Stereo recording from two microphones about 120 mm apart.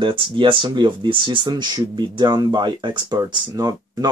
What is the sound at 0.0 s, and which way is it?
Speech, 45° right (ahead or behind).